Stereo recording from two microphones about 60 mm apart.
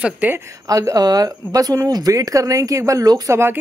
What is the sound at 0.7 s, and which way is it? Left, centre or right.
Speech, right.